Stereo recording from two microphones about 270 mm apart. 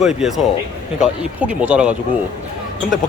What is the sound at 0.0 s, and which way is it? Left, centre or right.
Speech, centre.